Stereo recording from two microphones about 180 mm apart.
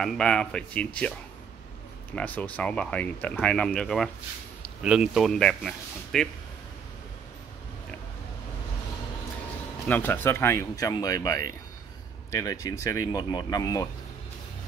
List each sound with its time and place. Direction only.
0.0 s speech: 5° left (ahead or behind)
2.1 s speech: 10° left (ahead or behind)
9.8 s speech: 10° left (ahead or behind)